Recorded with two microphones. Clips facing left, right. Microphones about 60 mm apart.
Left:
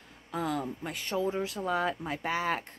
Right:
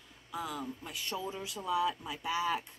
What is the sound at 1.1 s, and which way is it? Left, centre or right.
Speech, left.